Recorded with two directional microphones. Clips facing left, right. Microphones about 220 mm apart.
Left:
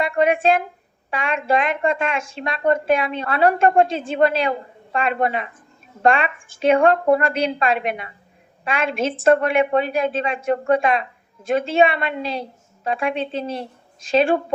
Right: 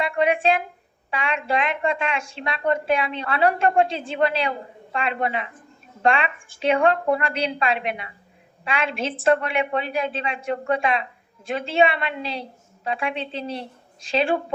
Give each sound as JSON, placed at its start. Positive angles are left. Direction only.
{"t": 0.0, "sound": "a woman's voice", "side_deg": 45}